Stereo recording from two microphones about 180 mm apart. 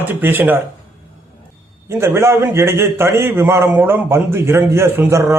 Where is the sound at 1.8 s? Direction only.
15° right (ahead or behind).